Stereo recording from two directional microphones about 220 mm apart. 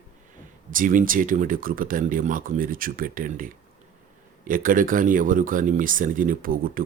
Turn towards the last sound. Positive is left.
turn(degrees=-40)  # may be behind; listen again after turning